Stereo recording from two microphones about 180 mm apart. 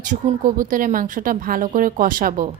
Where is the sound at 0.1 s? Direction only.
50° right (ahead or behind).